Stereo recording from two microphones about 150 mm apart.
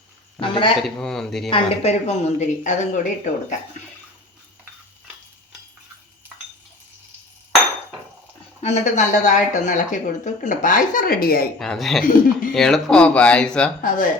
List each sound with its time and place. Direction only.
0.3 s a man's voice: 35° left (ahead or behind)
0.8 s speech: 5° left (ahead or behind)
1.5 s speech: 40° left (ahead or behind)
8.6 s speech: 50° left (ahead or behind); by 11.4 s 85° left
11.6 s speech: centre (ahead or behind)
12.0 s speech: 65° left (ahead or behind)
12.5 s speech: 5° left (ahead or behind)
13.8 s speech: 65° left (ahead or behind)